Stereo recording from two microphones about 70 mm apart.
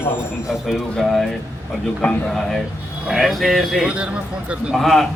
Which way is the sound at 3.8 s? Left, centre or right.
Centre.